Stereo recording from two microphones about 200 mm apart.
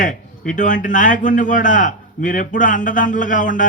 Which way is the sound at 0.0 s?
40° left (ahead or behind).